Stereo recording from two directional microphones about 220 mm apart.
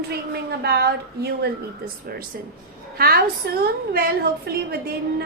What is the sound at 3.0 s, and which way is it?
A woman's voice, 45° right (ahead or behind).